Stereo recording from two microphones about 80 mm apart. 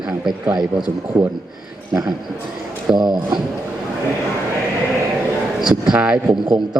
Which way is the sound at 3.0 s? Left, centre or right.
Right.